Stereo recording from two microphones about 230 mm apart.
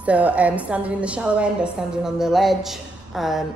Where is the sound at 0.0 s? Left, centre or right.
Centre.